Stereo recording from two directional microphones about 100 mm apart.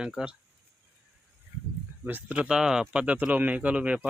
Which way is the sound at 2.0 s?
15° right (ahead or behind).